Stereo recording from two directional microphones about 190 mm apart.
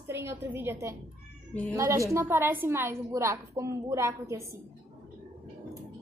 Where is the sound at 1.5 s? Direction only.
10° left (ahead or behind).